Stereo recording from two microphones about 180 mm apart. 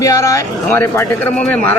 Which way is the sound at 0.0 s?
20° left (ahead or behind).